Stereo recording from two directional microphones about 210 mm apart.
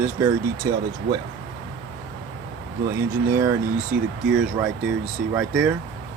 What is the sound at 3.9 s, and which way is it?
Speech, 45° right (ahead or behind).